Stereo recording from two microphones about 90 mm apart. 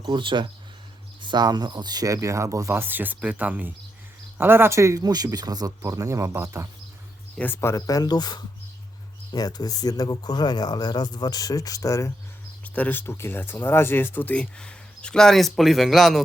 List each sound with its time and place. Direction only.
0.1 s speech: 65° right (ahead or behind)
1.2 s speech: 55° right (ahead or behind); by 6.7 s 35° right (ahead or behind)
7.3 s speech: 25° left (ahead or behind)
12.6 s speech: 15° left (ahead or behind); by 16.2 s centre (ahead or behind)